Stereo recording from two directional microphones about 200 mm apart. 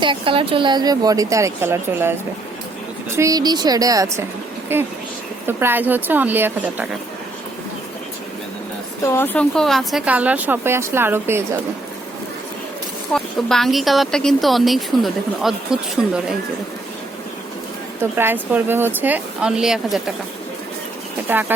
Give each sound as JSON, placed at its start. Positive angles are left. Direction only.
{"t": 0.0, "sound": "speech", "side_deg": -25}
{"t": 3.2, "sound": "speech", "side_deg": -15}
{"t": 9.0, "sound": "speech", "side_deg": 10}
{"t": 13.1, "sound": "a woman's voice", "side_deg": 0}
{"t": 18.0, "sound": "speech", "side_deg": -10}
{"t": 21.3, "sound": "speech", "side_deg": -10}